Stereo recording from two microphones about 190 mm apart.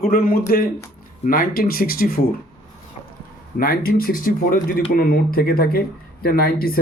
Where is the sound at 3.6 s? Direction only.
50° left (ahead or behind).